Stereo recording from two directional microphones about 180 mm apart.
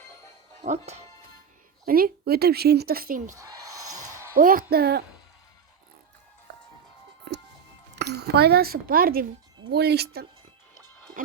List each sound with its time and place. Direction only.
0.6 s speech: 40° right (ahead or behind)
1.8 s a woman's voice: 55° right (ahead or behind)
3.3 s a sound: 20° right (ahead or behind)
4.4 s a woman's voice: 50° right (ahead or behind)
7.9 s a woman's voice: 65° right (ahead or behind)
9.6 s a woman's voice: 65° right (ahead or behind)